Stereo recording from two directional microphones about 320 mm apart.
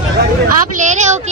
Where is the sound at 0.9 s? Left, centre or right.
Right.